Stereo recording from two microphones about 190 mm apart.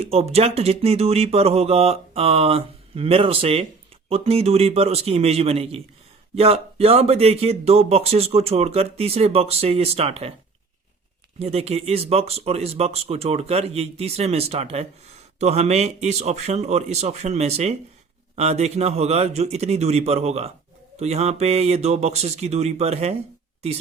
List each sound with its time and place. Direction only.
0.0 s speech: 30° right (ahead or behind)
11.3 s speech: 35° right (ahead or behind)